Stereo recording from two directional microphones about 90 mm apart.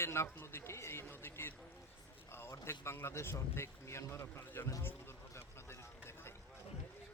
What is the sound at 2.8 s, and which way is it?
A man's voice, 30° left (ahead or behind).